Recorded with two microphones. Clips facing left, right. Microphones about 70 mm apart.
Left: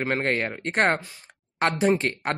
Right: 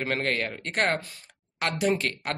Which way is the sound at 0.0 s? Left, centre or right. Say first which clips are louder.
Left 3 dB; left.